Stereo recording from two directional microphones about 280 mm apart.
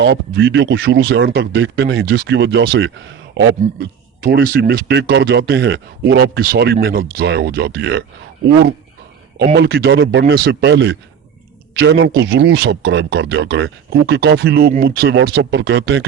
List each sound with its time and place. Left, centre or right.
0.0 s a man's voice: right